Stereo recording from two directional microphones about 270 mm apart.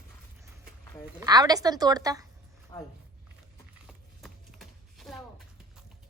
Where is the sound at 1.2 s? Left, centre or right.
Centre.